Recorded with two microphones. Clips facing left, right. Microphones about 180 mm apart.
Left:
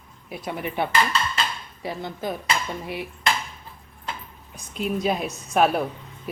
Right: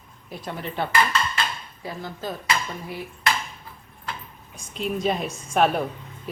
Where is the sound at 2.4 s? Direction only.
20° left (ahead or behind).